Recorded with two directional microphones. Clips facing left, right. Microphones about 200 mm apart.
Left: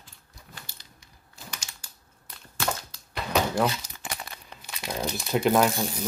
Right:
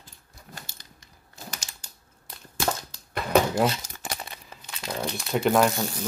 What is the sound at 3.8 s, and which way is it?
Crumpling, 40° right (ahead or behind).